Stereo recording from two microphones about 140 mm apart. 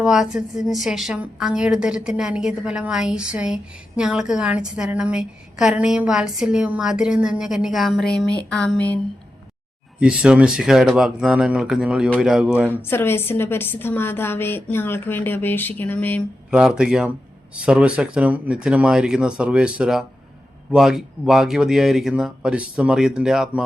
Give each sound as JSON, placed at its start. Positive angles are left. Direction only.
{"t": 0.0, "sound": "a woman's voice", "side_deg": -5}
{"t": 10.0, "sound": "a woman's voice", "side_deg": -5}
{"t": 12.8, "sound": "a woman's voice", "side_deg": 15}
{"t": 16.5, "sound": "a woman's voice", "side_deg": -5}